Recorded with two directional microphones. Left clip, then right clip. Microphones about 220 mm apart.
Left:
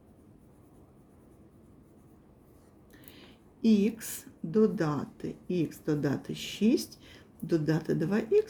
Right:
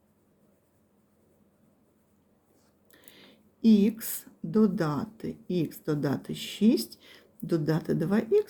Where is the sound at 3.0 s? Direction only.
20° right (ahead or behind).